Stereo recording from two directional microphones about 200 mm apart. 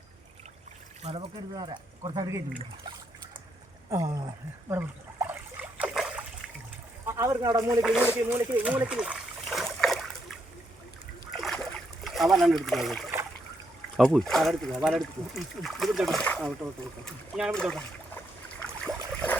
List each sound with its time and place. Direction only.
1.0 s speech: 25° right (ahead or behind)
3.8 s speech: 15° right (ahead or behind)
4.7 s splash: 10° right (ahead or behind)
7.1 s speech: 15° right (ahead or behind)
7.8 s speech: 5° right (ahead or behind)
8.9 s splash: 5° right (ahead or behind)
11.3 s a sound: centre (ahead or behind)
12.6 s speech: centre (ahead or behind)
18.9 s boat: 5° left (ahead or behind)